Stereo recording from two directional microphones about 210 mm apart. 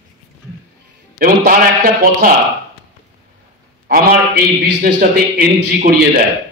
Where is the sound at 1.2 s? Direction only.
45° right (ahead or behind).